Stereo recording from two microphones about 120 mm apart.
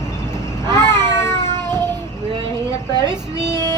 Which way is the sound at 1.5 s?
35° right (ahead or behind).